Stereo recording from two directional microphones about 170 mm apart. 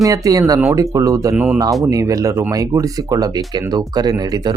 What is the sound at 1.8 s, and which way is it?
Speech, 20° right (ahead or behind).